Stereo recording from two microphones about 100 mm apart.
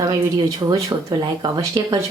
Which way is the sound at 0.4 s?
40° right (ahead or behind).